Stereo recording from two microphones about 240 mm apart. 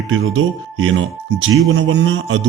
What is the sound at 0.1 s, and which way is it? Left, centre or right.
A man's voice, right.